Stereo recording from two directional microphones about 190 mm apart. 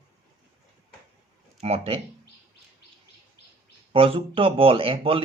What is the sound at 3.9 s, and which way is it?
Speech, 30° right (ahead or behind).